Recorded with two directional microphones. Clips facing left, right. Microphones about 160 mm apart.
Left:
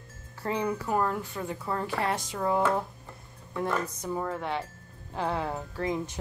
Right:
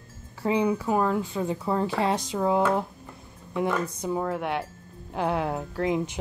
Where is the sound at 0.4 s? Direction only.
10° right (ahead or behind).